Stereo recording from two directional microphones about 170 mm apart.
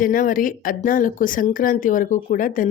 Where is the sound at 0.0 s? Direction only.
55° left (ahead or behind).